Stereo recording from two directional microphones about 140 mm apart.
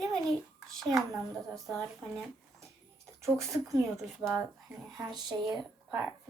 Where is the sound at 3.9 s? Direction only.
Centre (ahead or behind).